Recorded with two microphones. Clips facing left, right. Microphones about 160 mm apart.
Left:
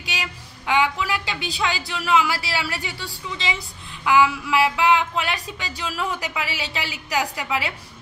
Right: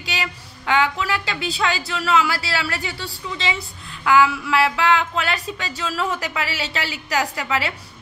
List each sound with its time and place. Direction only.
0.0 s speech: 15° left (ahead or behind)